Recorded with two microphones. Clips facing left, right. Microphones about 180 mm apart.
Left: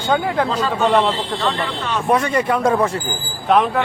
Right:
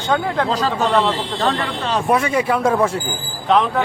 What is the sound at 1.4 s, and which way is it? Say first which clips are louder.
Speech: right 4 dB; 35° right (ahead or behind).